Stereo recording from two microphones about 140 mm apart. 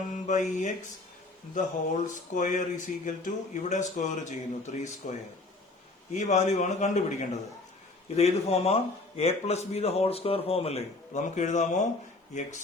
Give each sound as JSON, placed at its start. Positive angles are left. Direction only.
{"t": 0.1, "sound": "mantra", "side_deg": 60}
{"t": 2.3, "sound": "speech", "side_deg": 65}
{"t": 6.1, "sound": "a man's voice", "side_deg": 60}